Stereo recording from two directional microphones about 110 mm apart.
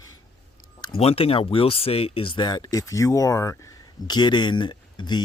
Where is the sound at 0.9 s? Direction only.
60° left (ahead or behind); by 3.7 s 25° left (ahead or behind).